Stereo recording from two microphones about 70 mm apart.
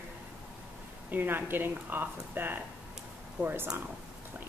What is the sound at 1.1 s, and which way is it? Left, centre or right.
Speech, right.